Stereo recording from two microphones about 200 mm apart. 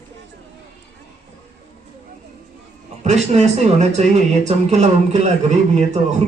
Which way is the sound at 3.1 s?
35° right (ahead or behind).